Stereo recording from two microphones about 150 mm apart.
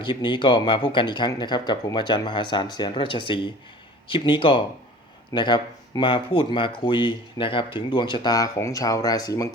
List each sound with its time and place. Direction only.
0.0 s speech: 35° left (ahead or behind)